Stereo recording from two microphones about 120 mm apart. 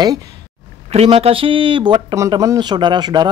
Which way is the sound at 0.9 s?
60° right (ahead or behind).